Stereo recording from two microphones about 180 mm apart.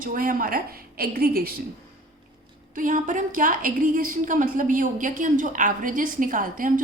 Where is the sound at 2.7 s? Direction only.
50° right (ahead or behind).